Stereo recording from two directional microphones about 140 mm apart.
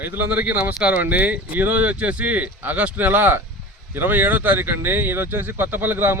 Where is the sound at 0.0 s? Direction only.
15° right (ahead or behind).